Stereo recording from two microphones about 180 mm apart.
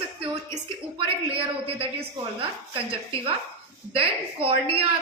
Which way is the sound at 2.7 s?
30° right (ahead or behind).